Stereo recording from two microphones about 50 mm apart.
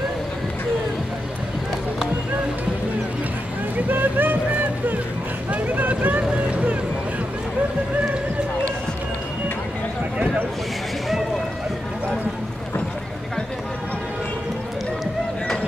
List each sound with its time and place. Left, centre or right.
3.9 s music: right
5.5 s vehicle: right
10.1 s a sound: right